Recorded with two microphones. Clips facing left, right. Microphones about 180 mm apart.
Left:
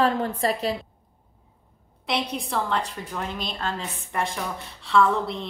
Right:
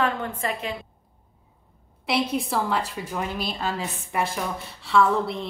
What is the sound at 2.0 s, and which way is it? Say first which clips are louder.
A woman's voice: right 3 dB; 5° right (ahead or behind).